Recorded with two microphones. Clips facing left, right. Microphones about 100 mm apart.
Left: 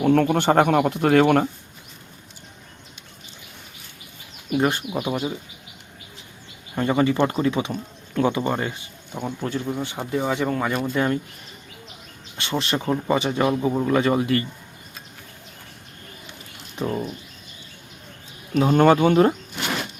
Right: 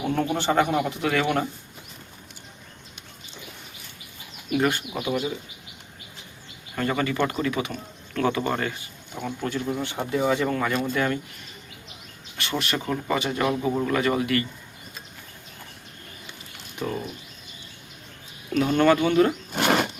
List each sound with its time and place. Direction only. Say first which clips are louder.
0.0 s speech: left 7 dB; 65° left (ahead or behind); by 1.5 s 50° left (ahead or behind)
4.5 s speech: left 2 dB; 25° left (ahead or behind)
4.9 s speech: left 2 dB; 40° left (ahead or behind)
6.7 s speech: left 5 dB; 20° left (ahead or behind)
12.4 s speech: left 3 dB; 25° left (ahead or behind)
18.5 s speech: left 3 dB; 35° left (ahead or behind)
19.5 s a sound: right 6 dB; 60° right (ahead or behind)